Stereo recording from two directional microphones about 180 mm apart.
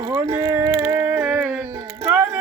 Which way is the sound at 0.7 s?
10° right (ahead or behind).